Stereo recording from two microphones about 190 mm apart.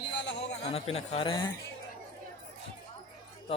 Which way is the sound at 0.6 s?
35° left (ahead or behind).